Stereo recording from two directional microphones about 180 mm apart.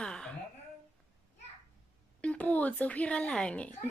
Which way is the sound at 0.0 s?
5° left (ahead or behind).